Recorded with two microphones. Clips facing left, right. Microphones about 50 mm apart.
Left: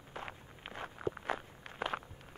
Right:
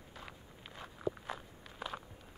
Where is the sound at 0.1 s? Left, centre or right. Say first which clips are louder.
Left 7 dB; left.